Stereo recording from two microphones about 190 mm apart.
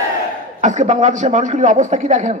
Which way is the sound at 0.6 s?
40° right (ahead or behind).